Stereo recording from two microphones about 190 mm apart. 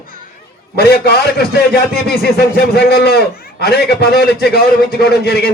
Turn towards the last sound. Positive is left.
turn(degrees=60)  # may be behind; listen again after turning